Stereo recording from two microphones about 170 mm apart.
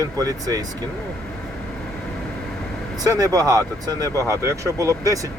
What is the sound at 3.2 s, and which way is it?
Speech, 20° right (ahead or behind).